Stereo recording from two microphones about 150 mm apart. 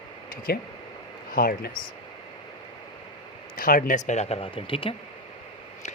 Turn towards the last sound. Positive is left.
turn(degrees=35)  # may be behind; listen again after turning